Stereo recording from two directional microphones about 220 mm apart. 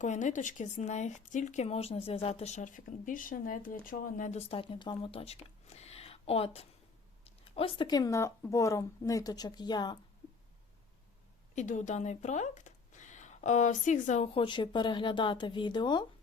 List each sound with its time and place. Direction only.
0.0 s speech: 35° left (ahead or behind)
11.5 s speech: 35° left (ahead or behind)